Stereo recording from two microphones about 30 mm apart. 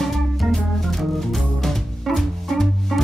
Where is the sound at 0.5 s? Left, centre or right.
Centre.